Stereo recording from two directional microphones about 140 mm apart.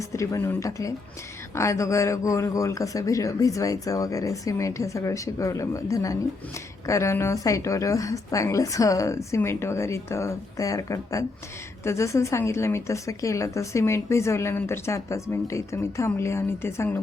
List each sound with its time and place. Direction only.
0.0 s a woman's voice: 20° left (ahead or behind)